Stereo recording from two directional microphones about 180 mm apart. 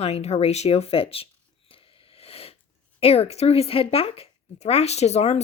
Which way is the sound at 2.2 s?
35° left (ahead or behind).